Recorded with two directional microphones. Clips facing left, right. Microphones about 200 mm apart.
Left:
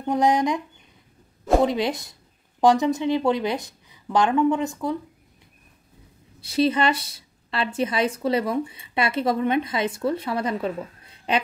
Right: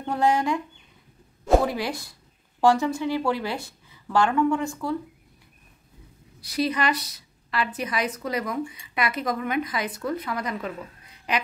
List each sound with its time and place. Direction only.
0.0 s speech: 15° left (ahead or behind)
1.6 s a woman's voice: 20° left (ahead or behind)
6.4 s a woman's voice: 25° left (ahead or behind)